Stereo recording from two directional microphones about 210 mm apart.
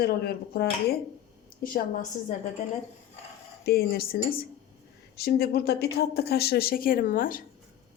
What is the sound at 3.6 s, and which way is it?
A woman's voice, 45° left (ahead or behind).